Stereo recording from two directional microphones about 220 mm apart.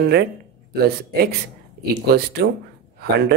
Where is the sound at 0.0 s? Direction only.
45° right (ahead or behind).